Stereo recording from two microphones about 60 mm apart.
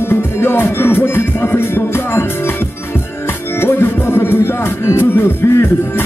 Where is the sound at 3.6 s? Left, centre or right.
Left.